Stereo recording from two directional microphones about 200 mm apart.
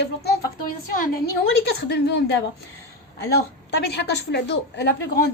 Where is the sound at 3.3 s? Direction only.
55° left (ahead or behind).